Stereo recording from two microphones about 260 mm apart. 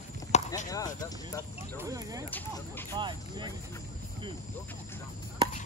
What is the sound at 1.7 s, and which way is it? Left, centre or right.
Speech, centre.